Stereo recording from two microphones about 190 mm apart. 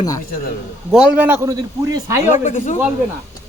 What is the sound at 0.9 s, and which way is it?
A man's voice, 5° right (ahead or behind).